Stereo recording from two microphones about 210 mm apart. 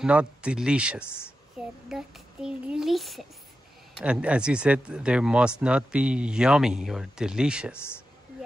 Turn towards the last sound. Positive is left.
turn(degrees=10)  # may be behind; listen again after turning